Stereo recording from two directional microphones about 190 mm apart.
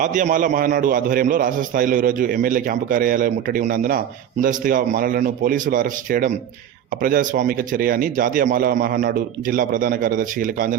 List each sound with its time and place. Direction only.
0.0 s a man's voice: 40° right (ahead or behind)